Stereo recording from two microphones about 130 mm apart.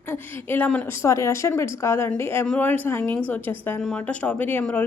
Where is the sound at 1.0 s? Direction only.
25° left (ahead or behind).